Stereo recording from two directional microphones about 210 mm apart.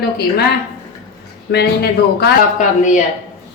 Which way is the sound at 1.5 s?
50° left (ahead or behind).